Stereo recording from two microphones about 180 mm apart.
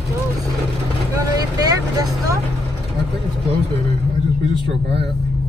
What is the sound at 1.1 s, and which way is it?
Speech, 20° right (ahead or behind).